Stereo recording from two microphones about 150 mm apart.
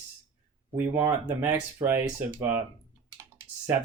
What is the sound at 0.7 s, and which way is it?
Speech, 15° right (ahead or behind).